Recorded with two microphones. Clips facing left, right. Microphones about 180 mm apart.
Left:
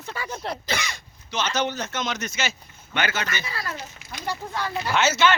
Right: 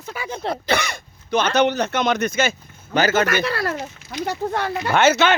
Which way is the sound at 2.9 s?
45° right (ahead or behind).